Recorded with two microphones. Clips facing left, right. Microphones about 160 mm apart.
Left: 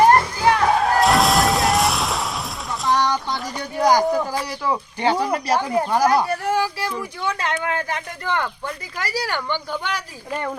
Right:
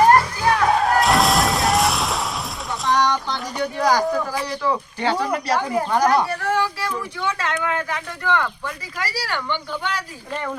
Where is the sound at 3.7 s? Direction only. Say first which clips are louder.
Left 3 dB; 15° left (ahead or behind).